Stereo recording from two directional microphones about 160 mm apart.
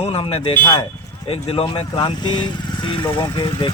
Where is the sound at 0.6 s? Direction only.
25° left (ahead or behind).